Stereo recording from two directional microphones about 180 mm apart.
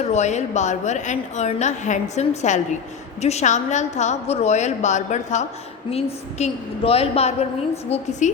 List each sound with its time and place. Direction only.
0.0 s a woman's voice: 40° left (ahead or behind)